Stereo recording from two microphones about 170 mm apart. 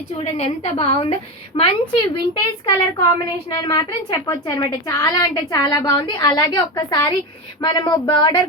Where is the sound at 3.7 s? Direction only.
25° left (ahead or behind).